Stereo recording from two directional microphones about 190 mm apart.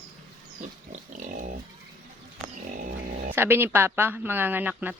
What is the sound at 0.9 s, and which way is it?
Pig, 40° right (ahead or behind).